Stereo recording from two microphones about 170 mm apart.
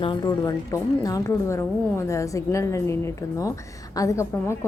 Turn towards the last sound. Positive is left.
turn(degrees=15)  # may be behind; listen again after turning